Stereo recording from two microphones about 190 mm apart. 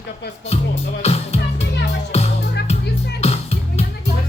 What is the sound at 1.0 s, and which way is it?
Music, 35° left (ahead or behind).